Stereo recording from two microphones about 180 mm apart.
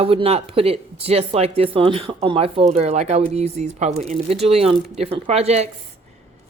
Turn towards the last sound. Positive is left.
turn(degrees=-35)  # may be behind; listen again after turning